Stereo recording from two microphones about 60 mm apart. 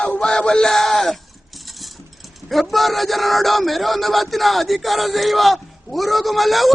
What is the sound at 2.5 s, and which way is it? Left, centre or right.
Speech, centre.